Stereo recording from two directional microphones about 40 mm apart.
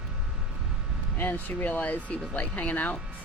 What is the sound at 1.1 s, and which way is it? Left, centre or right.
Speech, left.